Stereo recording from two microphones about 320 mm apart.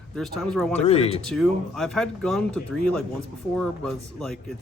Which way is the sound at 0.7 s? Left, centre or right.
Centre.